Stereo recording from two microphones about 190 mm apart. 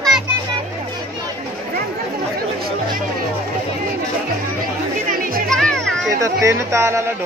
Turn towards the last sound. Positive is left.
turn(degrees=-15)  # may be behind; listen again after turning